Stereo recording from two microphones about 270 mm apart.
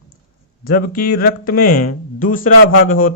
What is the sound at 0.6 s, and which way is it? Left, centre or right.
Speech, left.